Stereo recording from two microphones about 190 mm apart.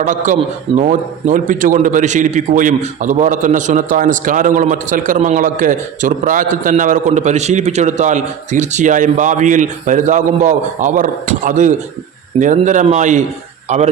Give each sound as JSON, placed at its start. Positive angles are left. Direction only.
{"t": 0.0, "sound": "a man's voice", "side_deg": -40}